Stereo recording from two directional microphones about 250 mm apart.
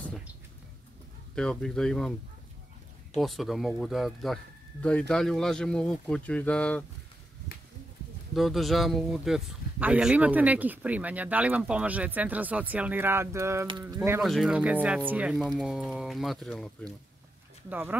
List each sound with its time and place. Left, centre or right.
1.3 s speech: centre
3.2 s speech: centre
8.4 s speech: centre